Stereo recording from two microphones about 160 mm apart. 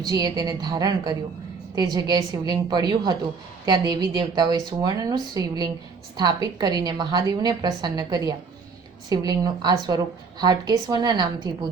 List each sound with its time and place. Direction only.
0.0 s a woman's voice: 25° right (ahead or behind)